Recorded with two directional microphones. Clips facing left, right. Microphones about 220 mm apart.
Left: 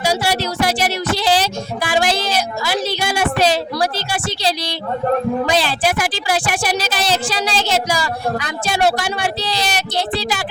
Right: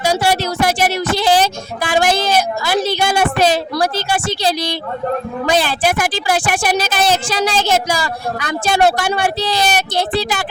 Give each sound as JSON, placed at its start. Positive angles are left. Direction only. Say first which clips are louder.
{"t": 0.0, "sound": "music", "louder": "right 3 dB", "side_deg": -50}
{"t": 5.5, "sound": "speech", "louder": "right 2 dB", "side_deg": -50}